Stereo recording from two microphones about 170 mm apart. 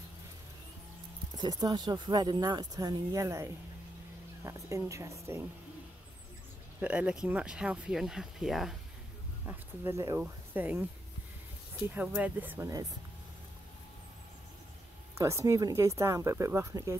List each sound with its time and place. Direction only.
1.4 s speech: 25° right (ahead or behind)
4.5 s speech: 20° right (ahead or behind)
6.8 s speech: 5° right (ahead or behind)
9.5 s speech: 15° right (ahead or behind)
11.9 s speech: 10° right (ahead or behind)
15.1 s speech: 15° right (ahead or behind)